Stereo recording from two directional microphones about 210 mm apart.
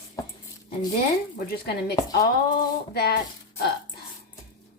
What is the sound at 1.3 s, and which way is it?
Speech, 50° left (ahead or behind).